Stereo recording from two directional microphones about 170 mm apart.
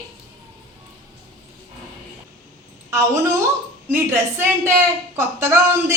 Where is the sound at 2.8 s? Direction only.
15° right (ahead or behind).